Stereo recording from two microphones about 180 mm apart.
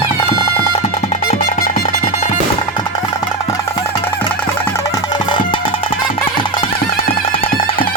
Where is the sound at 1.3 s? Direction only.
50° left (ahead or behind).